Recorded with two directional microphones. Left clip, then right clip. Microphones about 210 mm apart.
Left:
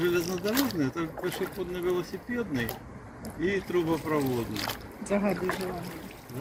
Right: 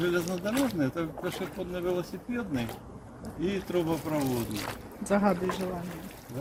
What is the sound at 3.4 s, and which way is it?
Speech, 50° right (ahead or behind).